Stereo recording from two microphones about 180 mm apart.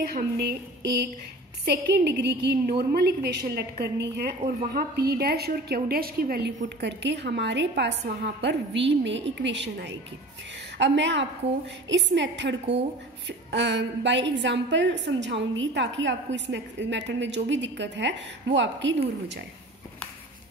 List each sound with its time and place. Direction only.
0.0 s a woman's voice: 60° right (ahead or behind); by 18.9 s 85° right